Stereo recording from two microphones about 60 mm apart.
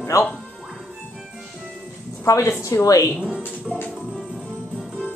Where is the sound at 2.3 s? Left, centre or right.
Left.